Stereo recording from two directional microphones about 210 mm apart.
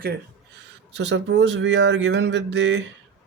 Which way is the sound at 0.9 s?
55° right (ahead or behind).